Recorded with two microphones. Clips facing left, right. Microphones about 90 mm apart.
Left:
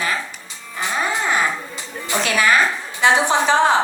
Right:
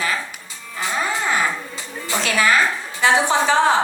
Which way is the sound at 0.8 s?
20° left (ahead or behind).